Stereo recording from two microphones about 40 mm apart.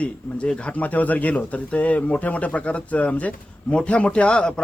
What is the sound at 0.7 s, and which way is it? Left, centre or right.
A man's voice, left.